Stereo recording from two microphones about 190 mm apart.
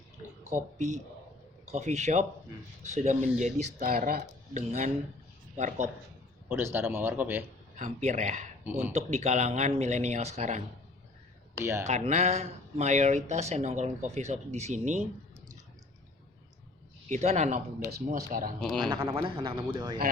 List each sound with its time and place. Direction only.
1.7 s speech: 35° right (ahead or behind)
6.5 s a man's voice: 10° right (ahead or behind)
7.8 s speech: 35° right (ahead or behind)
11.6 s a man's voice: 15° right (ahead or behind)
11.9 s speech: 35° right (ahead or behind)
17.1 s speech: 35° right (ahead or behind)
18.8 s speech: 25° right (ahead or behind)